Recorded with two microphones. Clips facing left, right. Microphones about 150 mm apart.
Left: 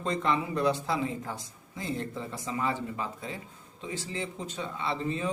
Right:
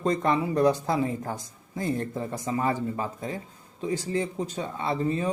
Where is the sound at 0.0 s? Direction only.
40° right (ahead or behind).